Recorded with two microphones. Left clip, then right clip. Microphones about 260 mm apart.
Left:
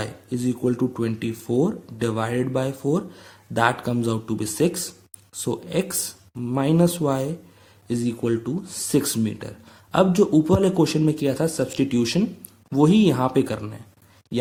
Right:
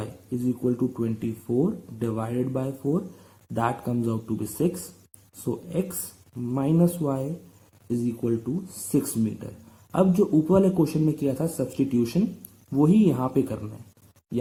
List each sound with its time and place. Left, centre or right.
0.6 s speech: left
6.5 s speech: left